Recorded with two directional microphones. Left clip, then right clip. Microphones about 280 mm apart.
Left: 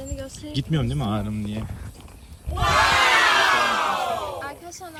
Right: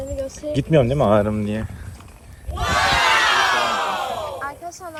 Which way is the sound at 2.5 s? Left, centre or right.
Centre.